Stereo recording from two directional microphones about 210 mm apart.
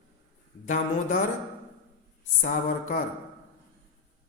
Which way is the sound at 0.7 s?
40° left (ahead or behind).